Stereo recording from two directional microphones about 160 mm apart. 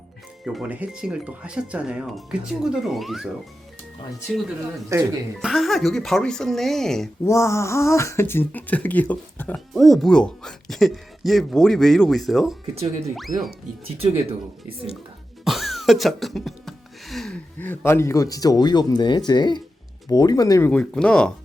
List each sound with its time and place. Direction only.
0.4 s speech: 5° right (ahead or behind)
4.9 s speech: 20° right (ahead or behind)
5.4 s speech: centre (ahead or behind)
7.3 s speech: 20° left (ahead or behind); by 12.5 s centre (ahead or behind)
13.3 s speech: 55° right (ahead or behind)
13.8 s speech: 35° right (ahead or behind)
15.4 s music: centre (ahead or behind); by 19.6 s 30° left (ahead or behind)
20.1 s speech: 25° left (ahead or behind)
20.7 s speech: 5° left (ahead or behind)